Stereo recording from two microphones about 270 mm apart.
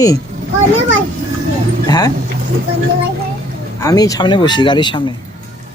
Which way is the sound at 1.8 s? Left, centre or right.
Centre.